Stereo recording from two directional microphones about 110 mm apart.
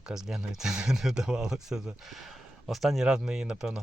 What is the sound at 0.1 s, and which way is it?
Speech, 5° right (ahead or behind).